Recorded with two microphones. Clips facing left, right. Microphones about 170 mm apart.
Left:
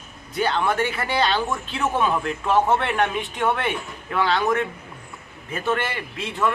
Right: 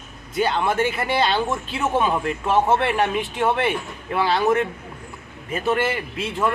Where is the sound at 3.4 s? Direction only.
25° right (ahead or behind).